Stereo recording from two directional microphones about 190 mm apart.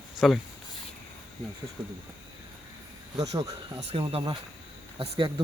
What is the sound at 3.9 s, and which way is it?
Speech, 30° right (ahead or behind).